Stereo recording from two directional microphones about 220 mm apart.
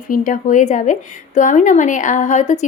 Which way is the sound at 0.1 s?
35° left (ahead or behind).